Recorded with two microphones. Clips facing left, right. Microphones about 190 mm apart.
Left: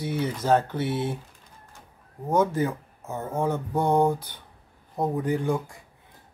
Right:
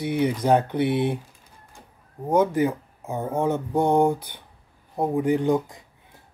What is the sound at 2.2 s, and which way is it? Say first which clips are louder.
Speech: right 3 dB; 15° right (ahead or behind).